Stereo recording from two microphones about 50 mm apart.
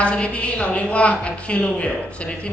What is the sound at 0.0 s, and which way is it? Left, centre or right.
A woman's voice, left.